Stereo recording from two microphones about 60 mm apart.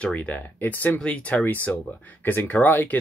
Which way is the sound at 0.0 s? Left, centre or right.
Left.